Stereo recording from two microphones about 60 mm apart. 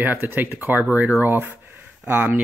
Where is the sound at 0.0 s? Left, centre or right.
Right.